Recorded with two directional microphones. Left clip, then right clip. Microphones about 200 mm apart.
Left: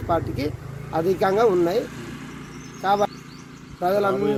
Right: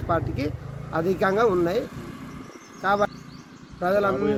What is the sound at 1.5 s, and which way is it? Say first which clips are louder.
Speech: left 3 dB; 30° right (ahead or behind).